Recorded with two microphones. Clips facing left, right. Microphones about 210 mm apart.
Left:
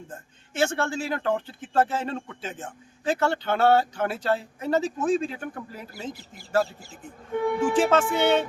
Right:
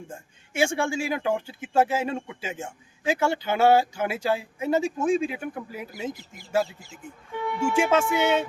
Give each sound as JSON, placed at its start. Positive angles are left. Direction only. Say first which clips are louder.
{"t": 0.1, "sound": "a man's voice", "louder": "right 1 dB", "side_deg": -10}
{"t": 6.9, "sound": "speech", "louder": "left 6 dB", "side_deg": 45}
{"t": 7.8, "sound": "a man's voice", "louder": "right 1 dB", "side_deg": -10}